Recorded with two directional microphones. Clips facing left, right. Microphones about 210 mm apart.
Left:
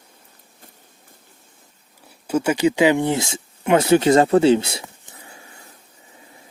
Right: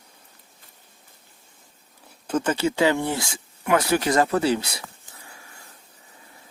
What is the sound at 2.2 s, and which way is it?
Speech, 10° left (ahead or behind).